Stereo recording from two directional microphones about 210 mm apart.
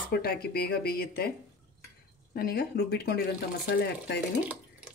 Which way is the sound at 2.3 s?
50° left (ahead or behind).